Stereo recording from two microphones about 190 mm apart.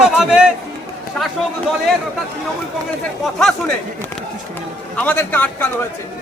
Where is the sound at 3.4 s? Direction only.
Centre (ahead or behind).